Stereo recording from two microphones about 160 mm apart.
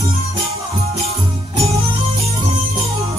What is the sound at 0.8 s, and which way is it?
Music, 40° right (ahead or behind).